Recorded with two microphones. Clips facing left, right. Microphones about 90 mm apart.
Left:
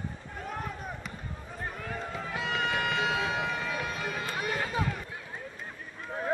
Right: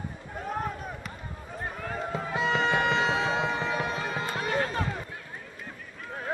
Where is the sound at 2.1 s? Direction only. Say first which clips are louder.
Right 7 dB; 30° right (ahead or behind).